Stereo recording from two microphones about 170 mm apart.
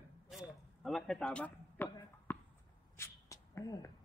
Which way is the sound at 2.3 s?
15° left (ahead or behind).